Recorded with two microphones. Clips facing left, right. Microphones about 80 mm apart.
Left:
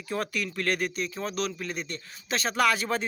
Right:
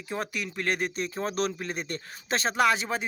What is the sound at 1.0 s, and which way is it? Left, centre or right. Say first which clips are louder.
Speech: right 2 dB; right.